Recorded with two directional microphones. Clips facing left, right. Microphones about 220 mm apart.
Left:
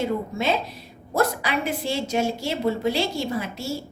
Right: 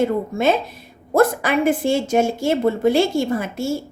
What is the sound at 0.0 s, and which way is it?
A woman's voice, 50° right (ahead or behind).